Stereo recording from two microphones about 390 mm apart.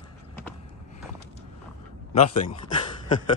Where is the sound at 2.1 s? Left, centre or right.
Centre.